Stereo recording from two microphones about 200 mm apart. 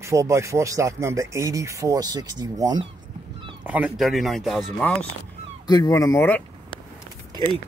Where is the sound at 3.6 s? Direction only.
5° right (ahead or behind).